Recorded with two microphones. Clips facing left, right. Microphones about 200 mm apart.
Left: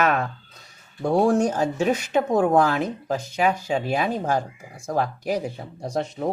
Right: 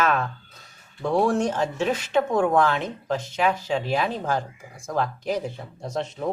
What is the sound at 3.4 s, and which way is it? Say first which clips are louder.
Speech: left 2 dB; 45° left (ahead or behind).